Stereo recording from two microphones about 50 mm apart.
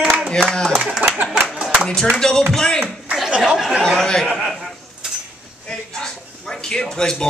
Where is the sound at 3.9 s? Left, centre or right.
Centre.